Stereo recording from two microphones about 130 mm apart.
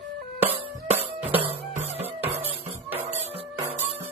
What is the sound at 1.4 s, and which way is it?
Music, 55° right (ahead or behind).